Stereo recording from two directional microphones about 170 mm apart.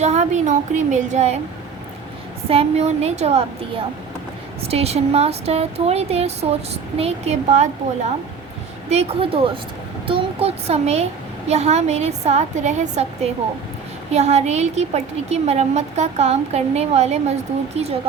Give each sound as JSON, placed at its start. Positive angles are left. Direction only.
{"t": 0.0, "sound": "a woman's voice", "side_deg": -40}
{"t": 2.5, "sound": "a woman's voice", "side_deg": -35}
{"t": 8.9, "sound": "a woman's voice", "side_deg": -35}